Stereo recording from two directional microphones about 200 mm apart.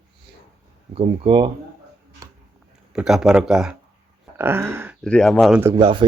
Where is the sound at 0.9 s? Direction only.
25° right (ahead or behind).